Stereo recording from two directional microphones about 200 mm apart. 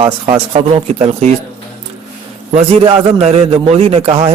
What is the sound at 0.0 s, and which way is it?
Speech, 30° right (ahead or behind).